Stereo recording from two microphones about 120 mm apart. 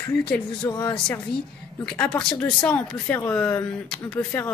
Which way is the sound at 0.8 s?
5° left (ahead or behind).